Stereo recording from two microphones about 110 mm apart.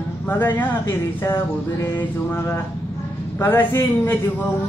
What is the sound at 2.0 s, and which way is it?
Speech, 20° left (ahead or behind).